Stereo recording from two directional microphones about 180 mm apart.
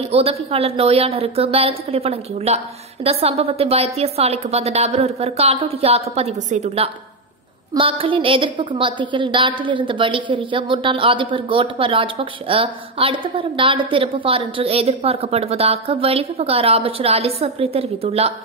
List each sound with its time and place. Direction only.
0.1 s a woman's voice: 35° right (ahead or behind)